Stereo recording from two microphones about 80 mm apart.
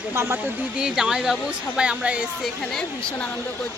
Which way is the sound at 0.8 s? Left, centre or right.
Centre.